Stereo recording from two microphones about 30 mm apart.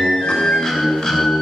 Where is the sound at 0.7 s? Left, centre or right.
Centre.